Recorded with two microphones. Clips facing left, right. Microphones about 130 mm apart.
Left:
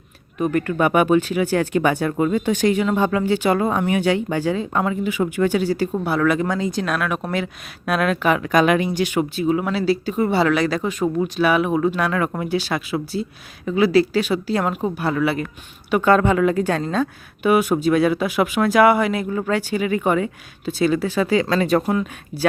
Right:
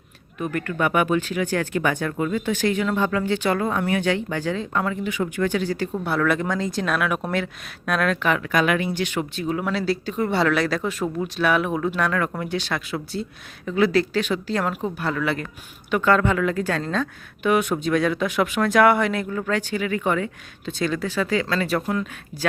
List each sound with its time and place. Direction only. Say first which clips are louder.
0.3 s speech: left 6 dB; 20° left (ahead or behind)
6.1 s speech: left 2 dB; centre (ahead or behind)
8.4 s speech: left 5 dB; 20° left (ahead or behind)